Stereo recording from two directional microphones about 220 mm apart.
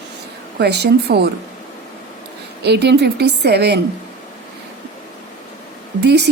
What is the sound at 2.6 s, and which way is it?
Speech, 50° right (ahead or behind).